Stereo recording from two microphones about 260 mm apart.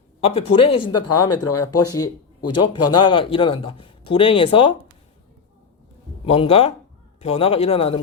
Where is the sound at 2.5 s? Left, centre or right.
Centre.